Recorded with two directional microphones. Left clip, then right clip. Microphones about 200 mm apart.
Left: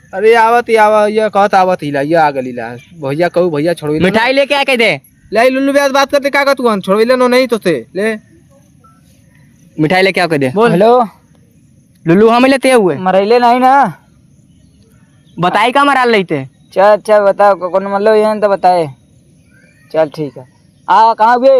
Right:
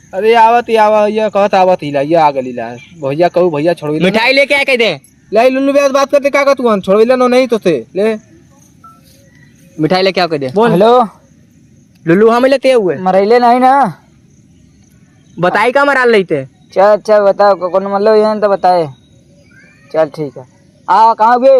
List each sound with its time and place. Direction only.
0.1 s speech: 20° left (ahead or behind)
3.9 s speech: 30° left (ahead or behind)
4.2 s speech: 10° left (ahead or behind)
4.8 s speech: 40° left (ahead or behind)
5.3 s speech: 5° left (ahead or behind)
9.7 s a man's voice: 40° left (ahead or behind)
10.5 s speech: 15° left (ahead or behind)
12.0 s a man's voice: 40° left (ahead or behind)
13.0 s speech: 10° left (ahead or behind)
13.4 s speech: centre (ahead or behind)
15.4 s speech: 35° left (ahead or behind)
16.7 s a man's voice: 10° left (ahead or behind)